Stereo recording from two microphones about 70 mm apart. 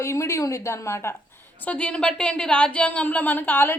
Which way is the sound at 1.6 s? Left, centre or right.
Centre.